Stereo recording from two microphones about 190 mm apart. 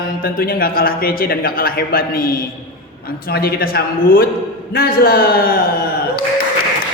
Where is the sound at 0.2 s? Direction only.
50° left (ahead or behind).